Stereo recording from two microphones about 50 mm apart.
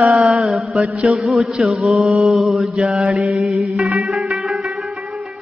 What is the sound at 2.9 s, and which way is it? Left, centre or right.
Mantra, right.